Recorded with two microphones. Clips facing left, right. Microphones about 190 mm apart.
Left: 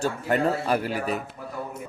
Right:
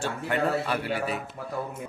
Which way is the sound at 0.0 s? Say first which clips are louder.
Left 3 dB; 40° left (ahead or behind).